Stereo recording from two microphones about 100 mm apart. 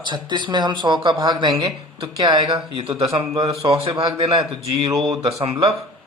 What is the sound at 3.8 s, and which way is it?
Speech, 70° right (ahead or behind).